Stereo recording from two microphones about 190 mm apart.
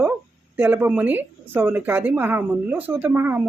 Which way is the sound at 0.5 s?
10° right (ahead or behind).